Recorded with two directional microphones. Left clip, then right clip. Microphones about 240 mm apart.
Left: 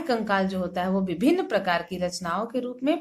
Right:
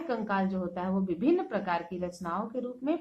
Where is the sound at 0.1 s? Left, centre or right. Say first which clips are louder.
Left 7 dB; left.